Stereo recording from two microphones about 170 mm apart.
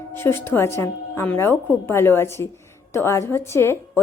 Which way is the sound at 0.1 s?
15° left (ahead or behind).